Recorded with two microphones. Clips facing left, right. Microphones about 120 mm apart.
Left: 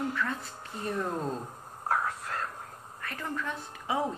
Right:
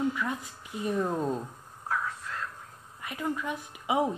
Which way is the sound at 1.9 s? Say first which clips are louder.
Left 3 dB; 60° left (ahead or behind).